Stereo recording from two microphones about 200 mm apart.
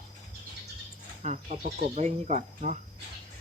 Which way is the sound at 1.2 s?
35° right (ahead or behind).